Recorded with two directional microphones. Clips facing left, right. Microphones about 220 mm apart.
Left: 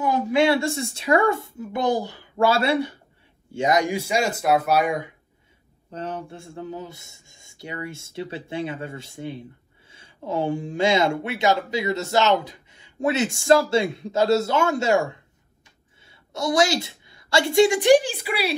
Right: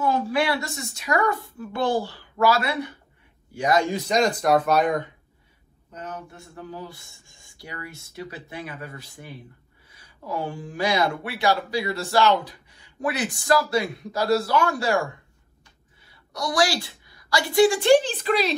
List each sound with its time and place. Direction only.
0.0 s speech: 15° left (ahead or behind)
5.9 s speech: 30° left (ahead or behind)
16.1 s a woman's voice: 25° left (ahead or behind)